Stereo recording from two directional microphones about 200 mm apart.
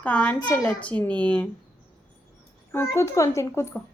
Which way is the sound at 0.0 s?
5° left (ahead or behind).